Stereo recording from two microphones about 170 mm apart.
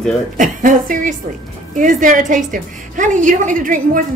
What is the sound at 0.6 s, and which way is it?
A woman's voice, 50° right (ahead or behind).